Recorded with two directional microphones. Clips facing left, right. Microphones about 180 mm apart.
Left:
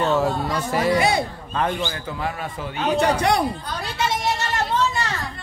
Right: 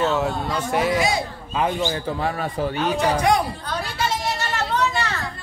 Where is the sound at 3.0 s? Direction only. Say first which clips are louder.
Even; 70° left (ahead or behind).